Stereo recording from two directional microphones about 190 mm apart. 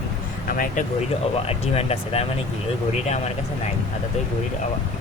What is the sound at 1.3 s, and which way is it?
Speech, 30° left (ahead or behind).